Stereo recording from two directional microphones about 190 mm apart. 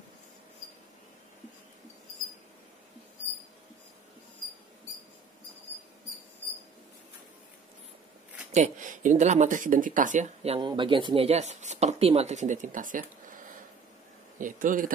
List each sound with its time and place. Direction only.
8.5 s speech: 35° right (ahead or behind)
14.4 s a man's voice: 45° right (ahead or behind)